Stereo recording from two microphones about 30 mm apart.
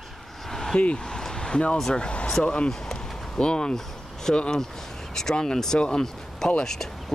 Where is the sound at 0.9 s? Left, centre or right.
Left.